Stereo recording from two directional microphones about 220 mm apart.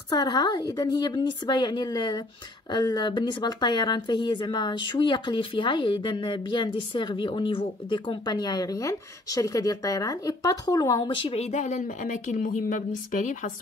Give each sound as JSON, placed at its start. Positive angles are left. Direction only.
{"t": 0.1, "sound": "speech", "side_deg": 20}